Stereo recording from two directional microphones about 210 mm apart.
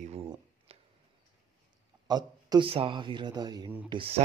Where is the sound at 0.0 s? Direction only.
30° right (ahead or behind).